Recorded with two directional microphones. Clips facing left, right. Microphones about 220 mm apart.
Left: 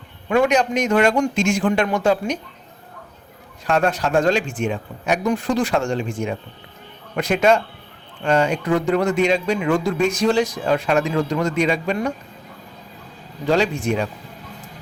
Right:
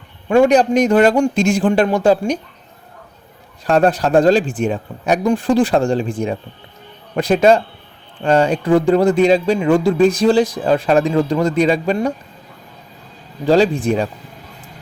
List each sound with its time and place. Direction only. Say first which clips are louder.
0.3 s speech: right 6 dB; 30° right (ahead or behind)
3.7 s speech: right 5 dB; 35° right (ahead or behind)
13.4 s speech: right 6 dB; 35° right (ahead or behind)